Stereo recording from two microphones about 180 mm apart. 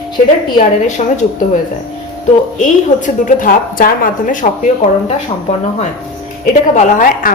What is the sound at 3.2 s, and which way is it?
Speech, 50° left (ahead or behind).